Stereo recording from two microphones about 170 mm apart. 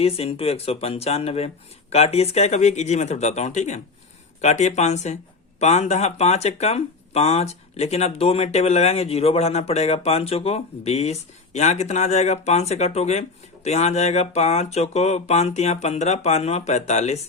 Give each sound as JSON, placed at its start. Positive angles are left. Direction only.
{"t": 0.0, "sound": "speech", "side_deg": 35}